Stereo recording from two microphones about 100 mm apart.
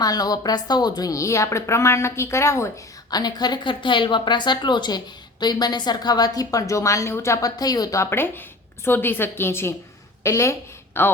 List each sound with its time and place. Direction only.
0.0 s a woman's voice: 40° left (ahead or behind)
3.1 s speech: 40° left (ahead or behind)
8.1 s a woman's voice: 20° left (ahead or behind)